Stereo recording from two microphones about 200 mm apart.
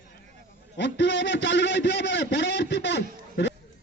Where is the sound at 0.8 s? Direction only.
60° left (ahead or behind).